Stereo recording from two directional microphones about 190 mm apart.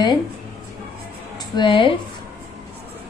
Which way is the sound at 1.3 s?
25° left (ahead or behind).